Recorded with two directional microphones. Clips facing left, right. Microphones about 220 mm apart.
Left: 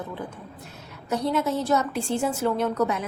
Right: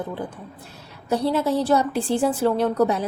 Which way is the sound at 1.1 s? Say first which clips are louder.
Right 3 dB; 30° right (ahead or behind).